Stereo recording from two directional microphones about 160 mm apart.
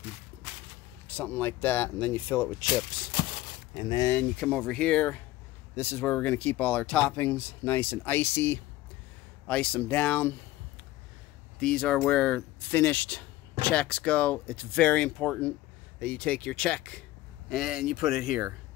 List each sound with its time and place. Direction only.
1.0 s speech: 10° left (ahead or behind)
3.7 s speech: 25° left (ahead or behind)
4.1 s speech: 10° left (ahead or behind)
11.6 s speech: 5° left (ahead or behind)